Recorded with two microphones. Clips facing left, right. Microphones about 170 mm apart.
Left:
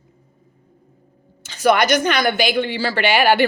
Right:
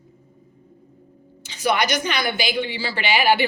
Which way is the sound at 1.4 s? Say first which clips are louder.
Left 6 dB; 50° left (ahead or behind).